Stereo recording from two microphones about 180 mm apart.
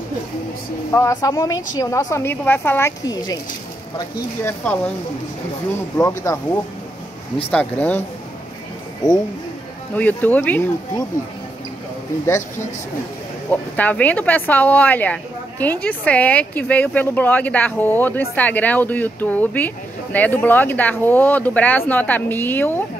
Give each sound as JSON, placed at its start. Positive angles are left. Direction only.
{"t": 0.9, "sound": "a woman's voice", "side_deg": 20}
{"t": 4.4, "sound": "speech", "side_deg": 10}
{"t": 5.9, "sound": "speech", "side_deg": 15}
{"t": 9.9, "sound": "speech", "side_deg": 10}
{"t": 13.5, "sound": "speech", "side_deg": 10}